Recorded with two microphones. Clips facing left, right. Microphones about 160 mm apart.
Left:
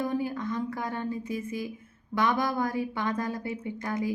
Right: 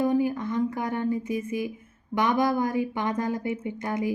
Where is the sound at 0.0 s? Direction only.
15° right (ahead or behind).